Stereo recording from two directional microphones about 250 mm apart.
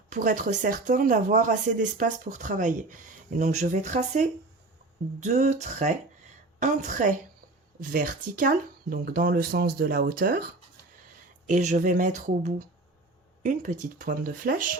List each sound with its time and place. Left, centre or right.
0.1 s speech: right